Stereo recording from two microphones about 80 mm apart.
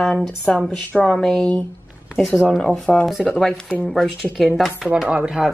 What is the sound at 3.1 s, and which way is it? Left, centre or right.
Speech, centre.